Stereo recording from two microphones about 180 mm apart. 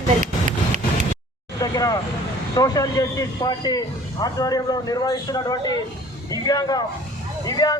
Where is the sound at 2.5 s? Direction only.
20° left (ahead or behind).